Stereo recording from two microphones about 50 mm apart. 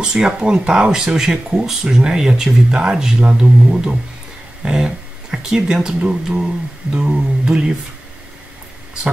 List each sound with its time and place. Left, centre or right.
0.0 s speech: centre